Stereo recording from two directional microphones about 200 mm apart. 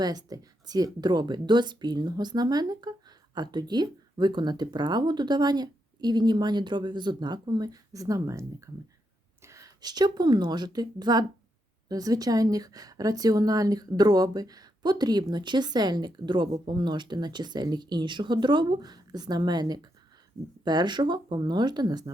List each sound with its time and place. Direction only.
0.0 s a woman's voice: 20° right (ahead or behind)